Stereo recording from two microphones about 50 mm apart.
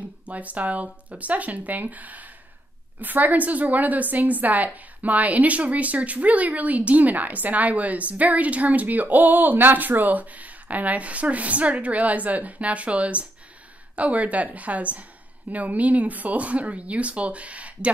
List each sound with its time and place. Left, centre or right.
0.2 s speech: right